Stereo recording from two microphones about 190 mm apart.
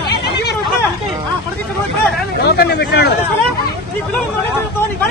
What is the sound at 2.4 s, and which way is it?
Speech, 55° left (ahead or behind).